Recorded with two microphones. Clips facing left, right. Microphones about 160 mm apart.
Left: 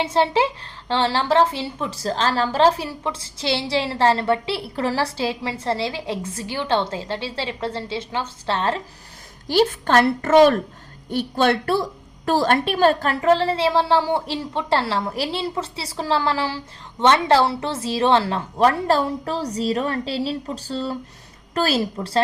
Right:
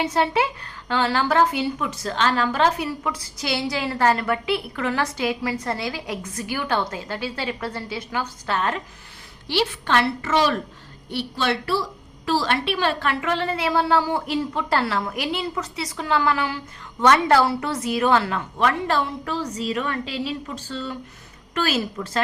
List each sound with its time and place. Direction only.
0.0 s a woman's voice: 25° left (ahead or behind)
9.5 s a woman's voice: 45° left (ahead or behind)